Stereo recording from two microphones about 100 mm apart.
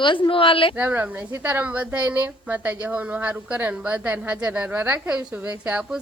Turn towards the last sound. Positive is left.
turn(degrees=-15)  # may be behind; listen again after turning